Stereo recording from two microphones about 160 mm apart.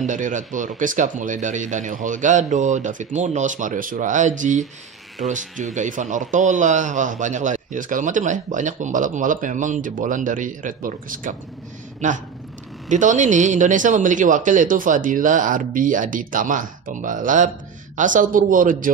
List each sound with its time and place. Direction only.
0.0 s a man's voice: 50° right (ahead or behind)
5.8 s a man's voice: 50° right (ahead or behind)